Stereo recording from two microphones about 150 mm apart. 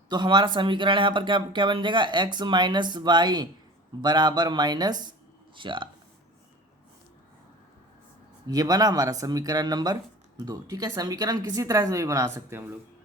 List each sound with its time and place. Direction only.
0.1 s a woman's voice: 30° right (ahead or behind)
8.4 s a woman's voice: 25° right (ahead or behind)